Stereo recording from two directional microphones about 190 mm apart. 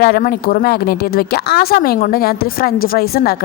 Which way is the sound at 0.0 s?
50° left (ahead or behind).